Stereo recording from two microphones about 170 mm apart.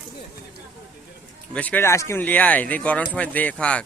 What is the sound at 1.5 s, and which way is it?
A man's voice, 10° left (ahead or behind).